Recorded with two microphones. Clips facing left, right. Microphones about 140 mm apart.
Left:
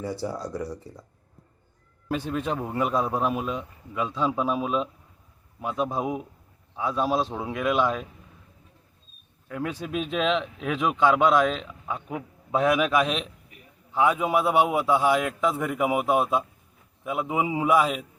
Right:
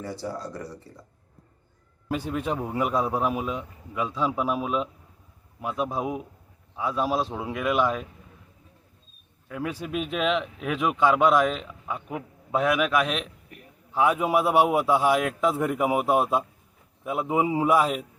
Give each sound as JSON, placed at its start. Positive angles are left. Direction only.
{"t": 0.0, "sound": "speech", "side_deg": 10}
{"t": 2.0, "sound": "a man's voice", "side_deg": -10}
{"t": 9.5, "sound": "a man's voice", "side_deg": -5}
{"t": 13.9, "sound": "a man's voice", "side_deg": -10}